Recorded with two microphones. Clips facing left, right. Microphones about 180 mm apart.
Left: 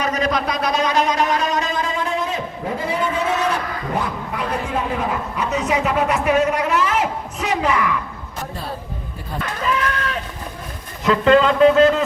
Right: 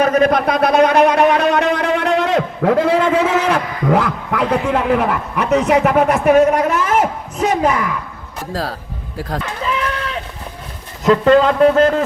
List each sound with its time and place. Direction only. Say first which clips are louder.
0.0 s a man's voice: right 8 dB; 55° right (ahead or behind)
11.0 s speech: right 3 dB; 45° right (ahead or behind)